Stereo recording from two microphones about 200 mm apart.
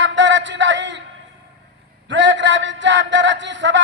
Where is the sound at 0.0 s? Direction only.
65° right (ahead or behind).